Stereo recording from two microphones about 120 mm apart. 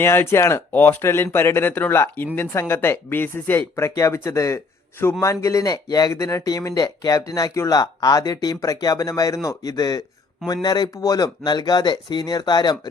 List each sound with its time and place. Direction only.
0.0 s speech: 20° left (ahead or behind); by 12.9 s 35° left (ahead or behind)